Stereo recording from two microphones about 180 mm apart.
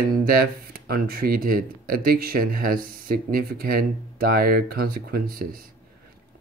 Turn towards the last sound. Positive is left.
turn(degrees=-55)  # may be behind; listen again after turning